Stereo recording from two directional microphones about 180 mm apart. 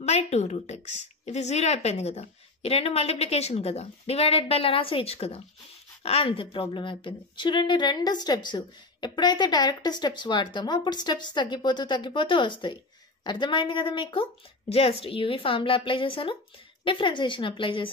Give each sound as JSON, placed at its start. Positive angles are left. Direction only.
{"t": 0.0, "sound": "a woman's voice", "side_deg": 35}